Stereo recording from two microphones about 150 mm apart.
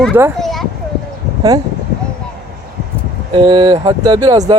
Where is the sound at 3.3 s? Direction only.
30° right (ahead or behind).